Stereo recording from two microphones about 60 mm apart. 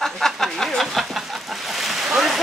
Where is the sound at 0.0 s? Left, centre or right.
Centre.